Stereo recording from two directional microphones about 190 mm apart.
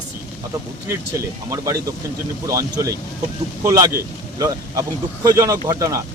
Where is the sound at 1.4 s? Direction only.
15° right (ahead or behind).